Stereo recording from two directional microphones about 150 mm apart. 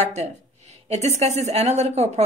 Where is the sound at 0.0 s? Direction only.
45° right (ahead or behind).